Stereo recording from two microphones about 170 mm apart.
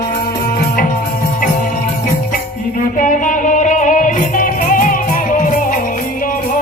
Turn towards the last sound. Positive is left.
turn(degrees=55)  # may be behind; listen again after turning